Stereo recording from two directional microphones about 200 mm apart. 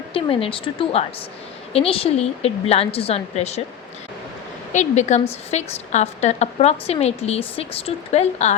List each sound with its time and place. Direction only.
0.1 s a woman's voice: 30° left (ahead or behind)
4.7 s a woman's voice: 35° left (ahead or behind)